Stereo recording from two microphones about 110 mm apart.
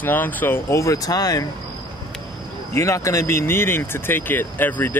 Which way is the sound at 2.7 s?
25° left (ahead or behind).